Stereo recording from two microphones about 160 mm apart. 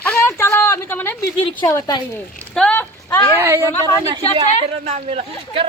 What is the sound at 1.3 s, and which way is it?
Speech, 35° left (ahead or behind).